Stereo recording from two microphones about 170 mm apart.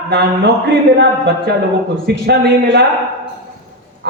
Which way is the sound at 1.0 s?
80° right.